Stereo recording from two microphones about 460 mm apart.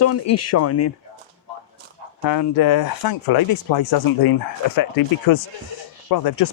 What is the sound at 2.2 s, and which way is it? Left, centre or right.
Speech, left.